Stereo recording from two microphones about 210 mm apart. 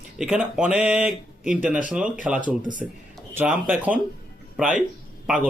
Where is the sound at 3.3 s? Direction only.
10° right (ahead or behind).